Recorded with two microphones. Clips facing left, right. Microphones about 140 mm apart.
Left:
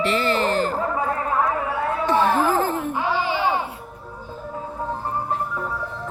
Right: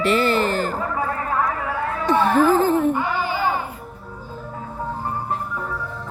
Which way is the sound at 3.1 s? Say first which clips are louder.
Even; 90° left.